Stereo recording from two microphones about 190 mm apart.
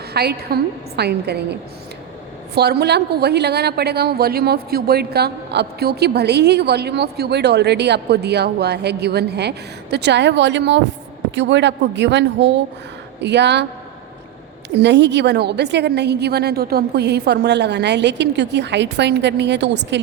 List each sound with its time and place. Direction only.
0.1 s a woman's voice: 55° right (ahead or behind)
2.6 s a woman's voice: 60° right (ahead or behind)
14.7 s a woman's voice: 65° right (ahead or behind)